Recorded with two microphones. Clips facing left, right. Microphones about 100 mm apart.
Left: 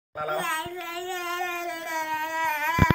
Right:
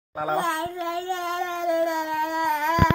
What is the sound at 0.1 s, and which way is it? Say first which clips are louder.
Babbling: right 4 dB; 20° right (ahead or behind).